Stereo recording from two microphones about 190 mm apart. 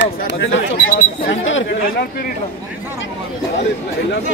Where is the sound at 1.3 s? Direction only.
85° left.